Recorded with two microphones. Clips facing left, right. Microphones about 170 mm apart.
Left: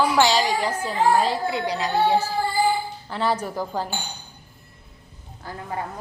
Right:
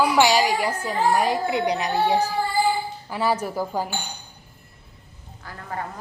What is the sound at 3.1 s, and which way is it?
Speech, 10° right (ahead or behind).